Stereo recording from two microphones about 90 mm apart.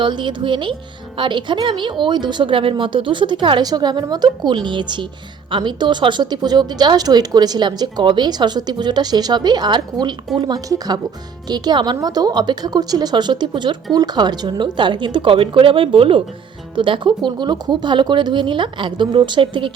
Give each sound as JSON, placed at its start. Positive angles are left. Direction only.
{"t": 0.0, "sound": "speech", "side_deg": -60}
{"t": 3.7, "sound": "a woman's voice", "side_deg": -50}
{"t": 10.7, "sound": "a woman's voice", "side_deg": -50}
{"t": 16.7, "sound": "speech", "side_deg": -65}